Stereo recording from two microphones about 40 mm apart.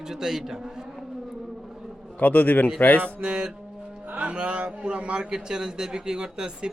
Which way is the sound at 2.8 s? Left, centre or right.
Left.